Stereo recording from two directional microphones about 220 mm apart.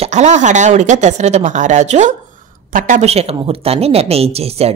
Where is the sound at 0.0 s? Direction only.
30° right (ahead or behind).